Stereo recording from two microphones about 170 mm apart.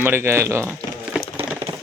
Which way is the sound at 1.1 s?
10° right (ahead or behind).